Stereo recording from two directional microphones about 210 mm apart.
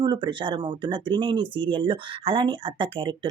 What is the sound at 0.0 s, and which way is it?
Speech, 20° right (ahead or behind).